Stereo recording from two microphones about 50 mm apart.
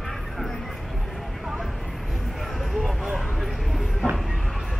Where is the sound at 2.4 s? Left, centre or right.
Centre.